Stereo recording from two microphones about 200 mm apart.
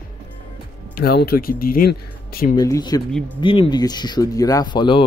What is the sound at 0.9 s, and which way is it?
Speech, 50° left (ahead or behind).